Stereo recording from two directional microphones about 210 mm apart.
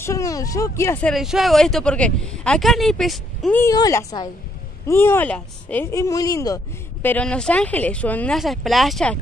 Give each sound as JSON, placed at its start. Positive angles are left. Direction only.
{"t": 0.0, "sound": "speech", "side_deg": 15}
{"t": 1.1, "sound": "speech", "side_deg": 0}
{"t": 3.6, "sound": "speech", "side_deg": 15}